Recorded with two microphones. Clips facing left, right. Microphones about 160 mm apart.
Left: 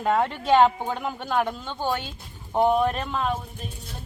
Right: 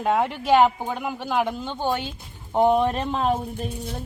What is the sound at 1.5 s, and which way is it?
A woman's voice, 20° right (ahead or behind).